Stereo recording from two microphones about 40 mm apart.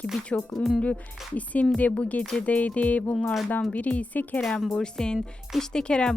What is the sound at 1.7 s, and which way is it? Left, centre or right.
Speech, left.